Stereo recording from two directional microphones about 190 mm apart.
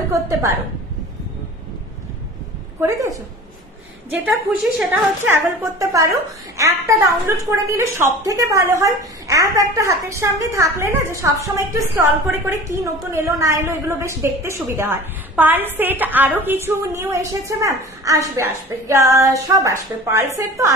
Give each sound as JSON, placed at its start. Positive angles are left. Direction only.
{"t": 0.1, "sound": "a woman's voice", "side_deg": -15}
{"t": 2.8, "sound": "a woman's voice", "side_deg": -15}
{"t": 4.3, "sound": "a woman's voice", "side_deg": -10}